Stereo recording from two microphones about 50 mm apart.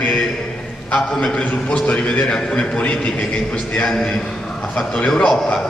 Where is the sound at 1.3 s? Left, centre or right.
Left.